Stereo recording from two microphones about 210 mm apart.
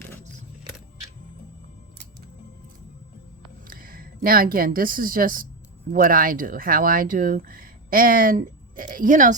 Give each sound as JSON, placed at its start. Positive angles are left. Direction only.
{"t": 3.7, "sound": "speech", "side_deg": -45}